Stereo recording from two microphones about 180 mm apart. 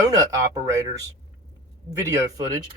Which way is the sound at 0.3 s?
20° right (ahead or behind).